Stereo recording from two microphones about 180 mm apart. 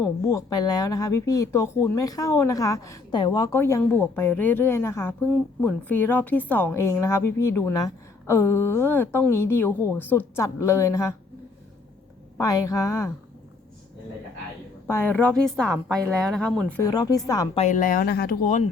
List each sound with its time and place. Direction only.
0.0 s speech: 20° left (ahead or behind)
12.4 s speech: 20° left (ahead or behind)
14.8 s a woman's voice: 10° left (ahead or behind)
16.8 s speech: 20° left (ahead or behind)
17.5 s speech: 40° left (ahead or behind); by 18.6 s 60° left (ahead or behind)